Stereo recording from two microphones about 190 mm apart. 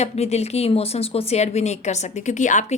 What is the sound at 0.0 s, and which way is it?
A woman's voice, 35° left (ahead or behind).